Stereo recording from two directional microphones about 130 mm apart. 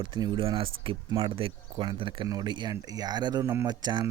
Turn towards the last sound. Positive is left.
turn(degrees=-35)  # may be behind; listen again after turning